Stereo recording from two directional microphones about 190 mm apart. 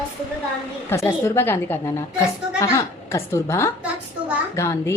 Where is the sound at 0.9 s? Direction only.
15° left (ahead or behind).